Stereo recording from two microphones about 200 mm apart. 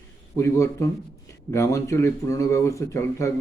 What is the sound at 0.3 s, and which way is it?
Speech, 15° left (ahead or behind).